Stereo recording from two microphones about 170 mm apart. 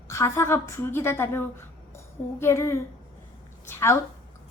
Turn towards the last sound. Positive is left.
turn(degrees=15)  # may be behind; listen again after turning